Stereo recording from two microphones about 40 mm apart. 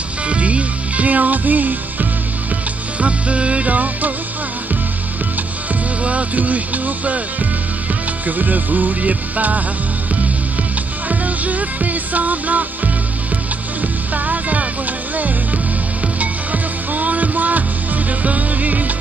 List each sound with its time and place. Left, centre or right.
0.3 s music: right
3.0 s music: right
6.0 s music: right
8.3 s music: right
11.1 s music: right
14.1 s music: right